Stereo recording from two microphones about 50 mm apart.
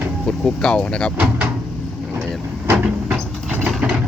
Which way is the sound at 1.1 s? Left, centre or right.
Right.